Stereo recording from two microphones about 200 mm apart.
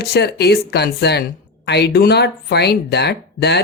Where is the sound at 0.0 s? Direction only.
55° left (ahead or behind).